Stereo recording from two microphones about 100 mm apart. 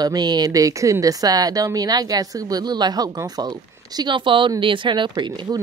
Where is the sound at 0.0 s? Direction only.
45° right (ahead or behind).